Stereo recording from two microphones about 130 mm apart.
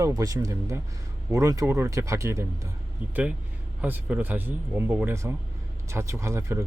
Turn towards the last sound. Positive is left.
turn(degrees=-20)  # may be behind; listen again after turning